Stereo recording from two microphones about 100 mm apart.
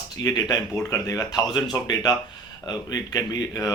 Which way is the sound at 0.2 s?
40° left (ahead or behind).